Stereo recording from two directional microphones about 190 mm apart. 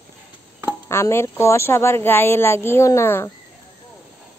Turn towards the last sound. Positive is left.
turn(degrees=15)  # may be behind; listen again after turning